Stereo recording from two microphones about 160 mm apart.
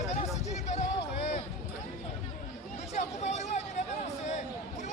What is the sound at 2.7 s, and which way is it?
Hubbub, 45° left (ahead or behind).